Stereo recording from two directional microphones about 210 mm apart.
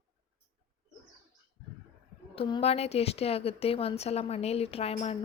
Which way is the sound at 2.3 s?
30° left (ahead or behind).